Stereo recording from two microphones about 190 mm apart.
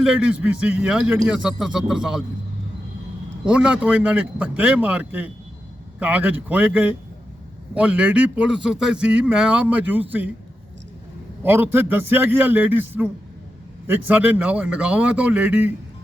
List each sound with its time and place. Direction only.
0.0 s a man's voice: 5° right (ahead or behind)
3.4 s speech: 5° right (ahead or behind)
11.4 s speech: 10° right (ahead or behind)